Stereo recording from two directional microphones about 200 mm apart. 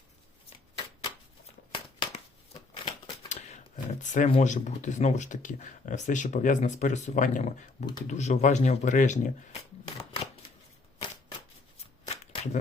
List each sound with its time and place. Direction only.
1.7 s scissors: 25° left (ahead or behind)
4.0 s speech: 40° left (ahead or behind)
9.8 s shuffling cards: 25° left (ahead or behind)
12.0 s shuffling cards: 30° left (ahead or behind)